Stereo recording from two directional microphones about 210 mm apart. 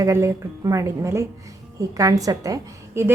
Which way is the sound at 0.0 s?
15° right (ahead or behind).